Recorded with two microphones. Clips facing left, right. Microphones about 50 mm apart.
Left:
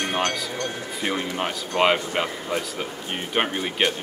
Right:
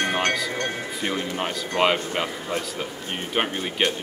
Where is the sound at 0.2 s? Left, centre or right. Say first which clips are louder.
Right 2 dB; right.